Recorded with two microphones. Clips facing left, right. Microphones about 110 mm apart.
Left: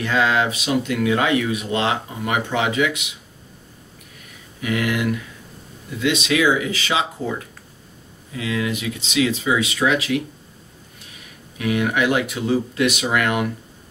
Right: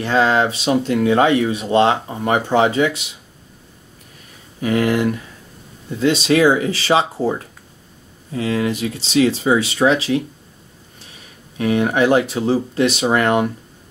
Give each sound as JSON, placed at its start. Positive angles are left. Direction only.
{"t": 0.0, "sound": "speech", "side_deg": -35}
{"t": 4.6, "sound": "speech", "side_deg": -35}
{"t": 11.5, "sound": "speech", "side_deg": -35}